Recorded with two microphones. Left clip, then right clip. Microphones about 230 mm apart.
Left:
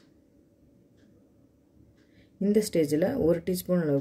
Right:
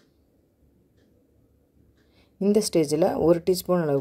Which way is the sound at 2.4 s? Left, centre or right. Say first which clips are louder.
Right 3 dB; right.